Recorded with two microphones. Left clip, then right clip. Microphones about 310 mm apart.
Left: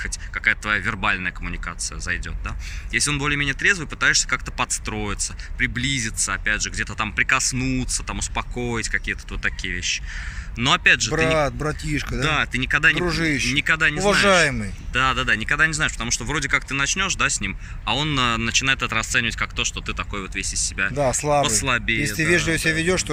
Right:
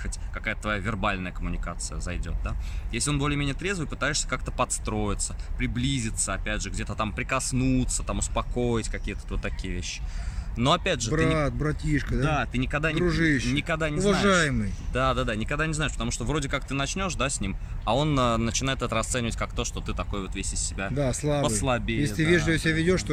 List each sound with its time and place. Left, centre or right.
0.0 s speech: centre
11.3 s speech: centre
12.2 s speech: centre
13.1 s speech: centre
13.6 s speech: centre
14.1 s speech: centre
14.9 s speech: centre
21.1 s speech: centre
21.4 s speech: centre
22.0 s speech: centre